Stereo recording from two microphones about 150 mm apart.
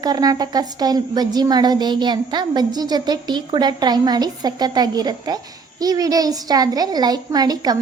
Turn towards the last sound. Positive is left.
turn(degrees=-25)  # may be behind; listen again after turning